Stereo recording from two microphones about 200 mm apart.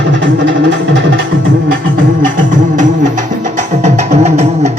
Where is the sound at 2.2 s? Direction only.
40° right (ahead or behind).